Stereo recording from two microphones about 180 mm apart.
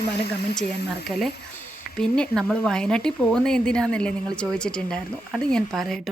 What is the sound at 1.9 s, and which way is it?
A woman's voice, 5° left (ahead or behind).